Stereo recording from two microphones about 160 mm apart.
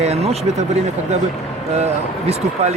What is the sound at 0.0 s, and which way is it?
Speech, 40° right (ahead or behind).